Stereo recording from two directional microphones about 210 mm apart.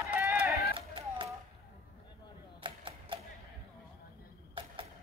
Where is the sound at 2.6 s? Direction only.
25° right (ahead or behind).